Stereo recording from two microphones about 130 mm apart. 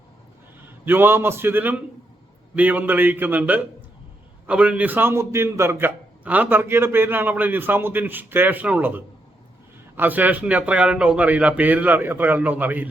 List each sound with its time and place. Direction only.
0.6 s a man's voice: 15° right (ahead or behind)